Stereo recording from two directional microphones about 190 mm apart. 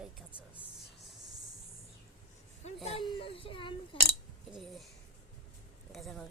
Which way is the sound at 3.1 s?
30° left (ahead or behind).